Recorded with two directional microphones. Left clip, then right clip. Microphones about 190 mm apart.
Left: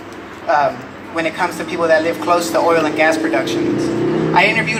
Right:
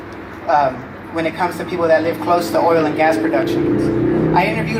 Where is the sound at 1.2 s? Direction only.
50° right (ahead or behind).